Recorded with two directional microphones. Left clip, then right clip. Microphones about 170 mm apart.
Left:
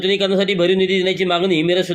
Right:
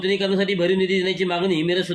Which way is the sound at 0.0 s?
35° right (ahead or behind).